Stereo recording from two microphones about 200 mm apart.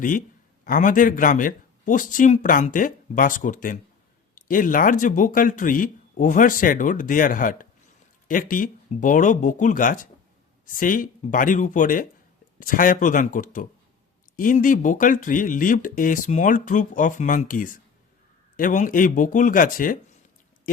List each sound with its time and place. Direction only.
0.6 s speech: 45° left (ahead or behind)